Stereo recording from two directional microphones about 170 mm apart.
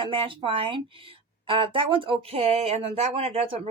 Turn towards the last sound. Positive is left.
turn(degrees=-35)  # may be behind; listen again after turning